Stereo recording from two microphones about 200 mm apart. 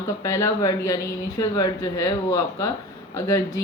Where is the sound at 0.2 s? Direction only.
15° left (ahead or behind).